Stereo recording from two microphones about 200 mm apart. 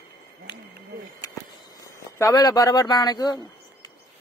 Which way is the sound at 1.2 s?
15° left (ahead or behind).